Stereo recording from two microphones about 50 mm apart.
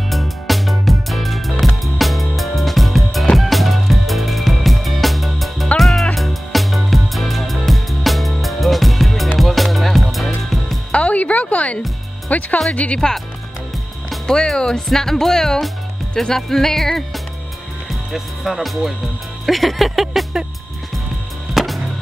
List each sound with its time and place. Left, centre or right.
0.1 s music: centre
10.9 s music: left
12.7 s speech: left
14.2 s speech: centre
19.4 s music: centre
21.6 s wood: centre